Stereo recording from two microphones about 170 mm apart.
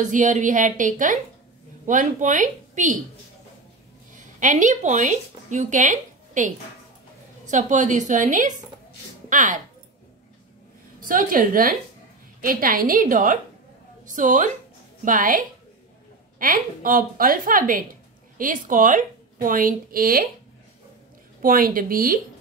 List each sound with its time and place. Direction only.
0.0 s a woman's voice: 45° right (ahead or behind)
4.1 s a woman's voice: 50° right (ahead or behind)
7.5 s a woman's voice: 45° right (ahead or behind)
11.1 s a woman's voice: 55° right (ahead or behind)
21.4 s a woman's voice: 55° right (ahead or behind)